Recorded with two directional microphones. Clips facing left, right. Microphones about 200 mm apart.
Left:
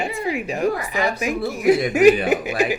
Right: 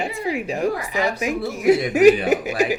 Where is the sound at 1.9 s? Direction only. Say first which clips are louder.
Right 1 dB; 35° right (ahead or behind).